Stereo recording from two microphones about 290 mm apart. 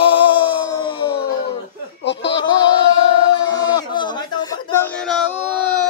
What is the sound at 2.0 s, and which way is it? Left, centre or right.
Speech, left.